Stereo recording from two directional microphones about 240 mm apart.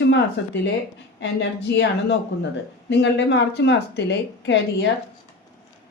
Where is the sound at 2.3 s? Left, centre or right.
Left.